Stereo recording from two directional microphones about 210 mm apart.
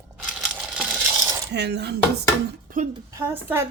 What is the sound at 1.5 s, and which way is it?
Dishes, 55° right (ahead or behind).